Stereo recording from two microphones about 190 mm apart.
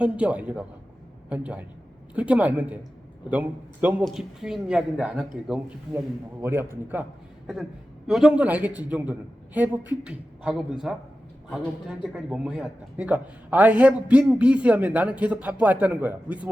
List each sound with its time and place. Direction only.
0.0 s speech: 5° right (ahead or behind)
7.4 s speech: centre (ahead or behind)